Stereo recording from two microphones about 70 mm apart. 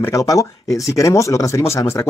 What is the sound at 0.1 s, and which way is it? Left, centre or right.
Speech, left.